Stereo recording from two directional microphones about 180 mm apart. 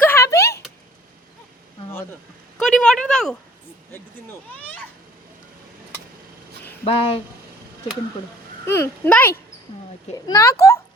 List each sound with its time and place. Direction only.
0.0 s a sound: 15° left (ahead or behind)
2.6 s speech: 5° left (ahead or behind)
6.8 s speech: 30° left (ahead or behind)
8.6 s speech: 15° left (ahead or behind)